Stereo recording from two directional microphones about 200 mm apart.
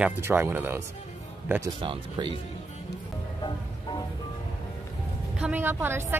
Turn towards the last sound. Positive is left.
turn(degrees=-10)  # may be behind; listen again after turning